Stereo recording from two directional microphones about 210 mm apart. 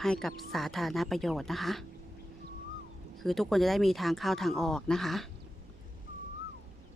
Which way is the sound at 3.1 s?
Centre (ahead or behind).